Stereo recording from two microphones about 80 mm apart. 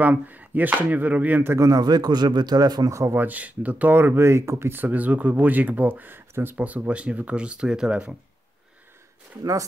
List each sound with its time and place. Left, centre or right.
0.0 s speech: right
1.6 s speech: right
3.2 s speech: right
9.4 s speech: right